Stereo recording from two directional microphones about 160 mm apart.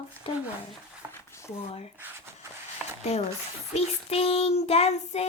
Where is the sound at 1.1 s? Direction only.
15° left (ahead or behind).